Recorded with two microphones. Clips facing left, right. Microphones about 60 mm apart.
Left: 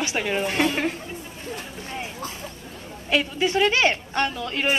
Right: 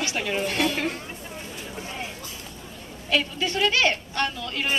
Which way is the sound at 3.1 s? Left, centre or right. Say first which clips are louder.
Left 3 dB; left.